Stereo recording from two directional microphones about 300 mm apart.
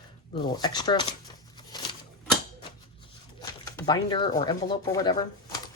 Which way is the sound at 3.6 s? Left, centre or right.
Centre.